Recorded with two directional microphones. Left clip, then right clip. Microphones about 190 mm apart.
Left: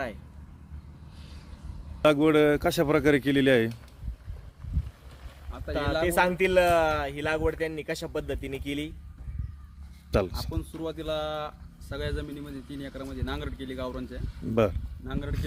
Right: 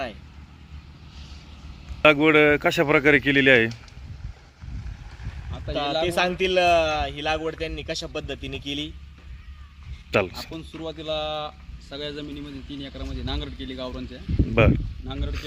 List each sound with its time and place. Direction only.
2.0 s speech: centre (ahead or behind)
5.5 s speech: centre (ahead or behind)
6.4 s speech: 20° left (ahead or behind)
10.1 s speech: centre (ahead or behind)